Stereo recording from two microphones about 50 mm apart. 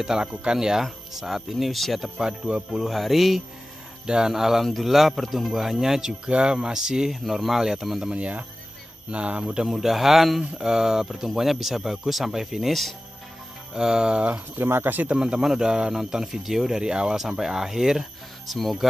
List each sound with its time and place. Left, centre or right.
0.0 s speech: centre
2.1 s speech: centre
2.8 s speech: centre
4.0 s speech: centre
8.1 s speech: right
9.4 s speech: centre
13.7 s speech: centre
14.6 s speech: right
15.0 s speech: centre